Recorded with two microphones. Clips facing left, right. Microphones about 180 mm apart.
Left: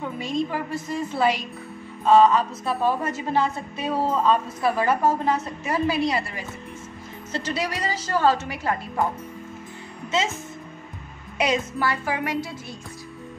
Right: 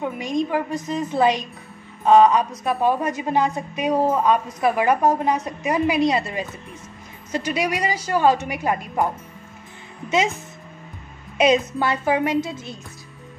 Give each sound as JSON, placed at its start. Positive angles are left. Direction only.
{"t": 0.0, "sound": "a woman's voice", "side_deg": -15}
{"t": 11.3, "sound": "a woman's voice", "side_deg": -20}